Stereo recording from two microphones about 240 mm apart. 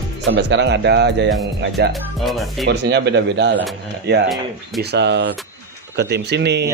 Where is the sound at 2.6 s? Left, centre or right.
Right.